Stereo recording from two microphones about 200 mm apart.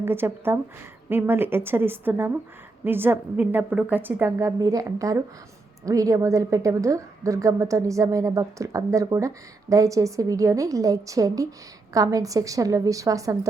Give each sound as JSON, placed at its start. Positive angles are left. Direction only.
{"t": 0.0, "sound": "a woman's voice", "side_deg": -10}